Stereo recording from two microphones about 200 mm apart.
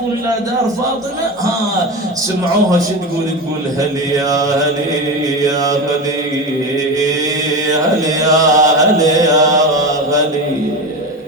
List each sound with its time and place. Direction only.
3.8 s mantra: 15° right (ahead or behind)
7.5 s chant: 15° right (ahead or behind)